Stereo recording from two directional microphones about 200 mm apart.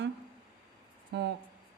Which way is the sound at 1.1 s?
55° right (ahead or behind).